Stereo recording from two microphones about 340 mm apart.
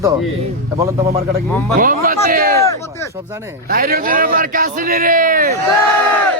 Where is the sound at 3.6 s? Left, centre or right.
Right.